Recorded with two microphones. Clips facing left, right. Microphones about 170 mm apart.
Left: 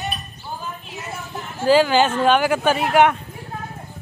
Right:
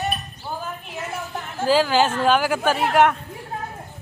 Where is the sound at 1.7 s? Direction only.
Centre (ahead or behind).